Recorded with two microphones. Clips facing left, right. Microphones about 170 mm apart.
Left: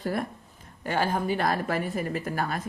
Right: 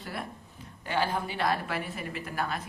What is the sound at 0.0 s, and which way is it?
A woman's voice, 45° left (ahead or behind).